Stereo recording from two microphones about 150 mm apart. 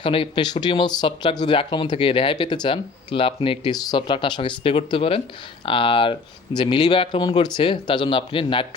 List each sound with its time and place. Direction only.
0.0 s speech: 35° left (ahead or behind)